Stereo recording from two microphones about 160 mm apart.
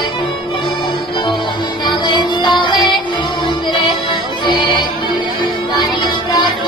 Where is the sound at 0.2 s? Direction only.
30° left (ahead or behind).